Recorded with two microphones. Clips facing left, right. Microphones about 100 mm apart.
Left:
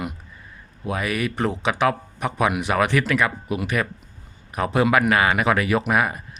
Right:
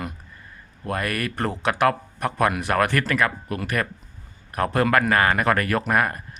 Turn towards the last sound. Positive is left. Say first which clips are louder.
# left 1 dB
turn(degrees=5)  # may be behind; listen again after turning